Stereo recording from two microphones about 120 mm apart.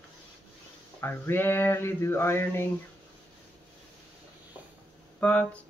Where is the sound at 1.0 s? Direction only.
15° left (ahead or behind).